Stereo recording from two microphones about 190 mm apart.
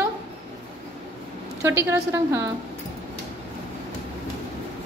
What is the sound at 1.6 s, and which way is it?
Speech, 15° right (ahead or behind).